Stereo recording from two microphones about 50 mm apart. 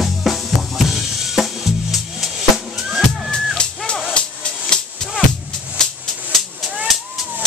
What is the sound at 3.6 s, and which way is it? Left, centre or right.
Music, centre.